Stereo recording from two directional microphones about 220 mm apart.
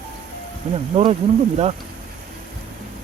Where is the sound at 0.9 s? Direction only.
30° right (ahead or behind).